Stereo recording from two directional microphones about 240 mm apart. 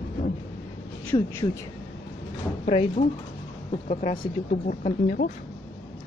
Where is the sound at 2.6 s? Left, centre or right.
Left.